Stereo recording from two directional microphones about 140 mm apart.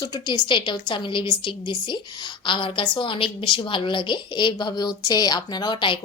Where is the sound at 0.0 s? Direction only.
30° left (ahead or behind).